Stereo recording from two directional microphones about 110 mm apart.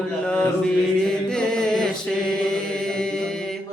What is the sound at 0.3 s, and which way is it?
Mantra, 10° left (ahead or behind).